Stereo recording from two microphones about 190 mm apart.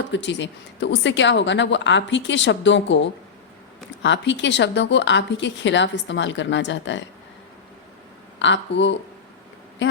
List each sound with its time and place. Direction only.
0.1 s speech: 70° left (ahead or behind)
8.4 s speech: 70° left (ahead or behind)